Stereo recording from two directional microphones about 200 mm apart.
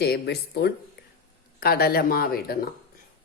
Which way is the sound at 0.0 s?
55° left (ahead or behind).